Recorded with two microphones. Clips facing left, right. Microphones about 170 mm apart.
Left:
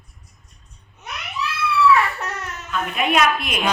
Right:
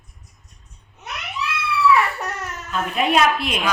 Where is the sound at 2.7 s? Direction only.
35° right (ahead or behind).